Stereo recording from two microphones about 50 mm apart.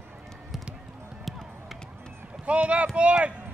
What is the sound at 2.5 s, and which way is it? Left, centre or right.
Speech, right.